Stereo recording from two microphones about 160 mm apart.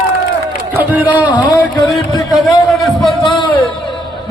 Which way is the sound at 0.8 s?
10° right (ahead or behind).